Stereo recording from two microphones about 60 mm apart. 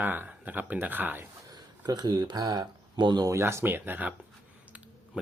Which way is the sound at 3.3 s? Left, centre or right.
Right.